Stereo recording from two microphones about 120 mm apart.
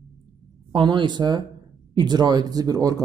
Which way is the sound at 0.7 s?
40° right (ahead or behind).